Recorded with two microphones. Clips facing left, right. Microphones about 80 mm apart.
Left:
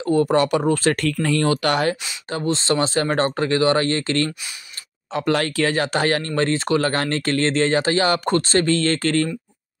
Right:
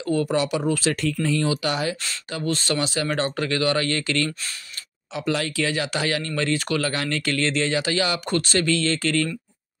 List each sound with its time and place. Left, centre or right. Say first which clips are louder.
0.0 s speech: left 5 dB; left
0.4 s speech: left 5 dB; left
2.4 s speech: left 4 dB; left
5.1 s speech: left 4 dB; left